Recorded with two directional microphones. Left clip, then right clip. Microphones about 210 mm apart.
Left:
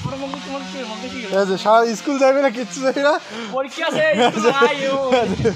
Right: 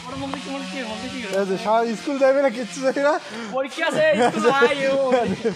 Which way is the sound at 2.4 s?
20° left (ahead or behind).